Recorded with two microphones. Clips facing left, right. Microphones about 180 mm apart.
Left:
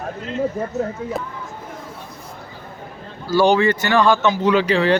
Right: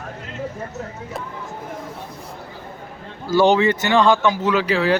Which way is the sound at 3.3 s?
20° right (ahead or behind).